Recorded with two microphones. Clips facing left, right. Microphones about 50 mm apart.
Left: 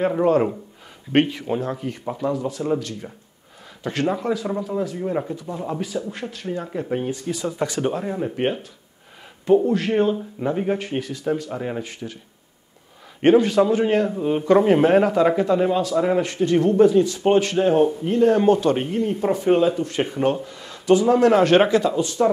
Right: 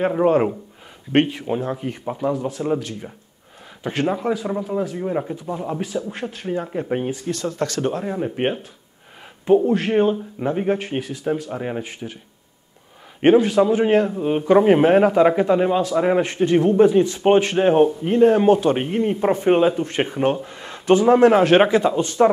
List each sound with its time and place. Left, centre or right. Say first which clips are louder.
0.0 s a man's voice: right 1 dB; centre
5.9 s speech: right 2 dB; centre
6.3 s a man's voice: right 3 dB; right
7.2 s speech: right 1 dB; centre
7.9 s speech: right 1 dB; centre
9.8 s speech: right 2 dB; centre
11.8 s a man's voice: right 1 dB; right
13.2 s a man's voice: right 1 dB; centre; by 18.3 s right
18.3 s speech: right 1 dB; centre
18.9 s a man's voice: right 2 dB; right
20.2 s a man's voice: right 1 dB; centre
20.4 s speech: right 1 dB; right
21.3 s a man's voice: right 1 dB; centre
21.9 s speech: right 3 dB; right